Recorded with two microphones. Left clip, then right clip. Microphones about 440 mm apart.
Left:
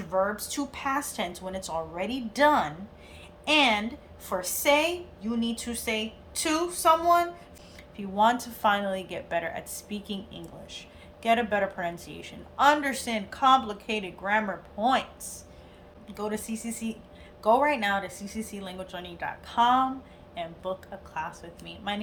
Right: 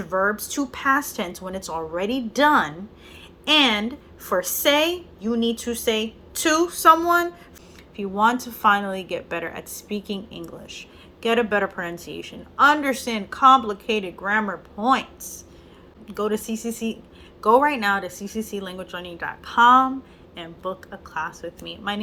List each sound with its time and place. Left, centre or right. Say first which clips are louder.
0.3 s a woman's voice: right 5 dB; centre
9.0 s a woman's voice: right 3 dB; left
9.7 s a woman's voice: right 7 dB; centre
11.3 s a woman's voice: right 4 dB; left
11.9 s a woman's voice: right 7 dB; centre
16.3 s a woman's voice: right 8 dB; centre
21.1 s a woman's voice: right 7 dB; centre